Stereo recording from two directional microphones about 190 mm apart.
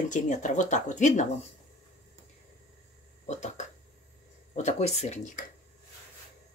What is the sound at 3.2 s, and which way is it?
Speech, 40° left (ahead or behind).